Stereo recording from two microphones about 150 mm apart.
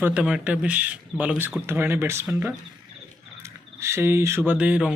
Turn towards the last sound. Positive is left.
turn(degrees=-10)  # may be behind; listen again after turning